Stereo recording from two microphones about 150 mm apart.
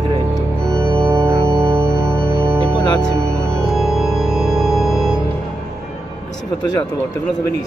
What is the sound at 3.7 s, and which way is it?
Music, centre (ahead or behind).